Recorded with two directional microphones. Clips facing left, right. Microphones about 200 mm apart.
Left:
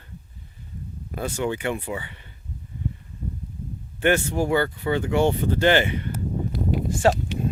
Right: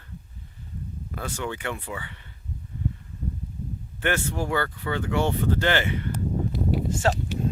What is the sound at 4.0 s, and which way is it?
Speech, 15° left (ahead or behind).